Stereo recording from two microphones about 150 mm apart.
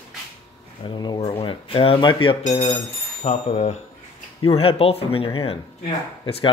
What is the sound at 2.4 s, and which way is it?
Chime, 50° left (ahead or behind).